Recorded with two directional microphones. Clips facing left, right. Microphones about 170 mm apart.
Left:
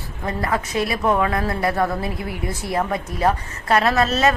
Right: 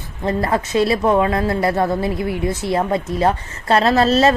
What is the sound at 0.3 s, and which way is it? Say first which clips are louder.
A woman's voice: right 5 dB; 30° right (ahead or behind).